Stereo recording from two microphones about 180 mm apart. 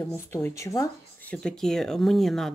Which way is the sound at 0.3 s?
15° left (ahead or behind).